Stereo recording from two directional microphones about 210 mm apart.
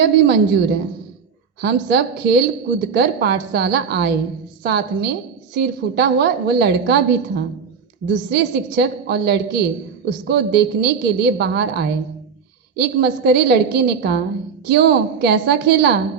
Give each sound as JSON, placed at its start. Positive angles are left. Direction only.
{"t": 0.0, "sound": "speech", "side_deg": -50}